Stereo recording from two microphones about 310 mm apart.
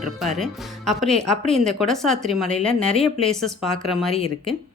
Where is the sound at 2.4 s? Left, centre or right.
Centre.